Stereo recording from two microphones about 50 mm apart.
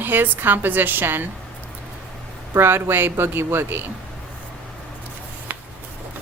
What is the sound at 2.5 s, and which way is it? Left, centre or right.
Speech, right.